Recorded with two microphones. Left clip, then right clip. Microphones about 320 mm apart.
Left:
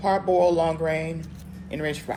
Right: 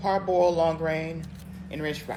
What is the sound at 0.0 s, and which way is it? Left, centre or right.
Speech, left.